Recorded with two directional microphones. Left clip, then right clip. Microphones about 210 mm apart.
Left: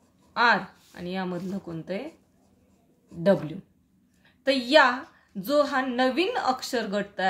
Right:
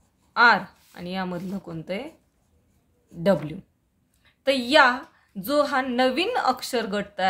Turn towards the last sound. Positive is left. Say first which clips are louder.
# right 2 dB
turn(degrees=-25)  # may be behind; listen again after turning